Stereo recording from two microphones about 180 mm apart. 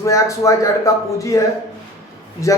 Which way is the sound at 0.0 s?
15° left (ahead or behind).